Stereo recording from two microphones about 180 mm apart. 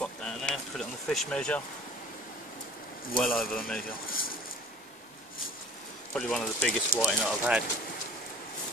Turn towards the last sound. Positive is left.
turn(degrees=0)  # may be behind; listen again after turning